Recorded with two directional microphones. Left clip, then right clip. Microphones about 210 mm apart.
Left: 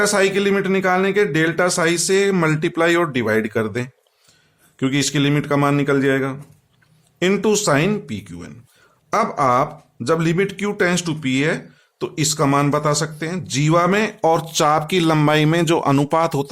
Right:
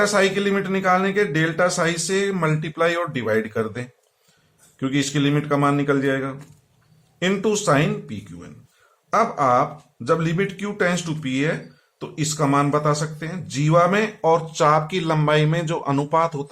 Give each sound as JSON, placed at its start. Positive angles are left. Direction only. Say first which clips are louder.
{"t": 0.0, "sound": "a man's voice", "louder": "left 2 dB", "side_deg": 40}